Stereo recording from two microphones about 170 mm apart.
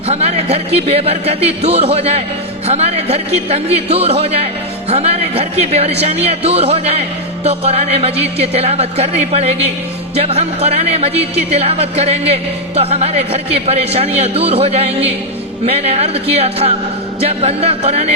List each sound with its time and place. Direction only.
0.1 s speech: 35° right (ahead or behind)